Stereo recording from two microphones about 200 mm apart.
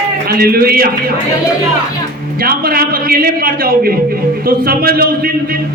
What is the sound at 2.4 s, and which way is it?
A man's voice, 50° right (ahead or behind).